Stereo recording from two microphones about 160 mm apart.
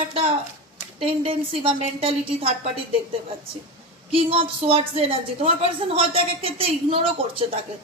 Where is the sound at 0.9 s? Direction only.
35° right (ahead or behind).